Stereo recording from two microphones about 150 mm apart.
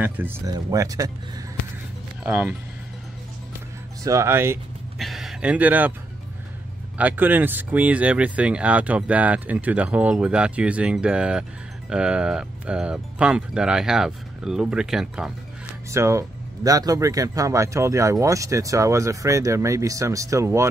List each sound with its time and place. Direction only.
0.0 s speech: 15° right (ahead or behind)
0.5 s speech: 25° right (ahead or behind)
2.2 s speech: 10° right (ahead or behind)
4.0 s speech: 20° right (ahead or behind)
4.9 s a man's voice: centre (ahead or behind)
7.0 s speech: 10° right (ahead or behind)
15.9 s speech: 20° right (ahead or behind)